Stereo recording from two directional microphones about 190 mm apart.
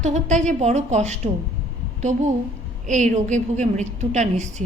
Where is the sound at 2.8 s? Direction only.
40° right (ahead or behind).